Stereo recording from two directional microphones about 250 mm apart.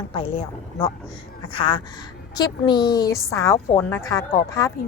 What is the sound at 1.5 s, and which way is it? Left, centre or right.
A woman's voice, centre.